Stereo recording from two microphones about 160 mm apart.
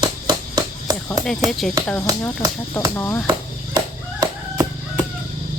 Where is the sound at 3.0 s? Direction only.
15° left (ahead or behind).